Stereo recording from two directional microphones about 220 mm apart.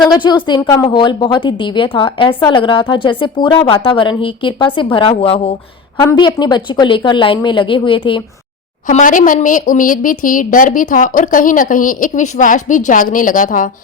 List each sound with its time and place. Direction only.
0.1 s a woman's voice: 20° left (ahead or behind)
8.9 s a woman's voice: 35° left (ahead or behind)